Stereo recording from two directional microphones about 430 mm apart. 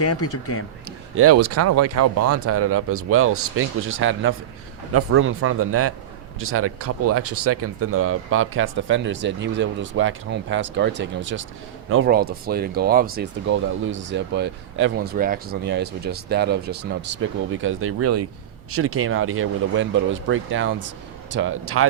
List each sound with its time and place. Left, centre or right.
0.0 s speech: left
0.9 s speech: right